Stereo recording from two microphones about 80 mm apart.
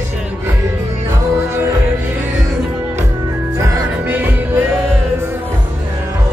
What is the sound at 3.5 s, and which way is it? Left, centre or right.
Music, right.